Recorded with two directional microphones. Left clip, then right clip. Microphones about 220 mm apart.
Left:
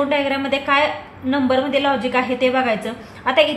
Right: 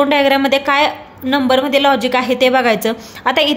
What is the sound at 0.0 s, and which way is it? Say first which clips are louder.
A woman's voice: right 7 dB; 55° right (ahead or behind).